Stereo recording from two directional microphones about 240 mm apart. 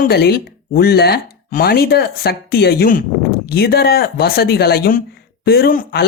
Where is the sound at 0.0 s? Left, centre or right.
Left.